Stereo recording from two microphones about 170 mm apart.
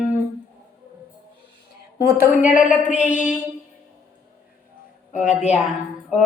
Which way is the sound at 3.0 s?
45° left (ahead or behind).